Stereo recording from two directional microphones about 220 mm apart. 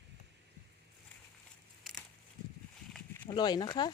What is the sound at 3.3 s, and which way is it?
Speech, 20° left (ahead or behind).